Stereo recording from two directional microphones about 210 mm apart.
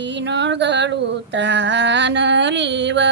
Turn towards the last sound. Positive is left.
turn(degrees=-55)  # may be behind; listen again after turning